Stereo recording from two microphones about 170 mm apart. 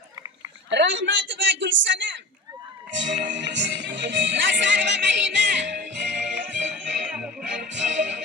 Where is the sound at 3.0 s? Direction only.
90° right.